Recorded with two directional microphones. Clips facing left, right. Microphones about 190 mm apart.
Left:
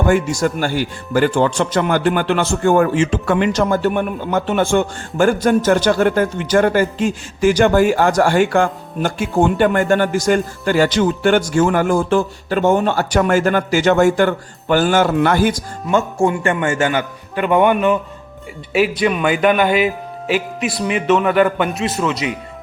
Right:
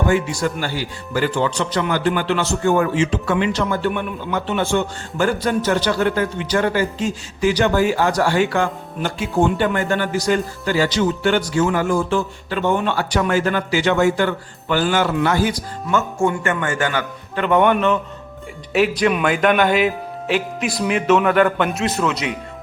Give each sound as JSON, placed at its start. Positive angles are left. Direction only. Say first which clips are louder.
{"t": 0.1, "sound": "speech", "louder": "left 3 dB", "side_deg": 45}
{"t": 16.0, "sound": "a man's voice", "louder": "left 3 dB", "side_deg": 30}